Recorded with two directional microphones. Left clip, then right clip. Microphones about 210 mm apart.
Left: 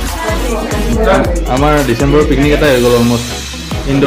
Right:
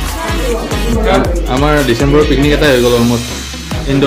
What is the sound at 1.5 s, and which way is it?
Speech, centre (ahead or behind).